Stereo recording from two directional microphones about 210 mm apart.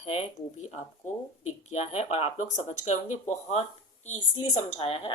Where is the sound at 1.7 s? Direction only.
30° left (ahead or behind).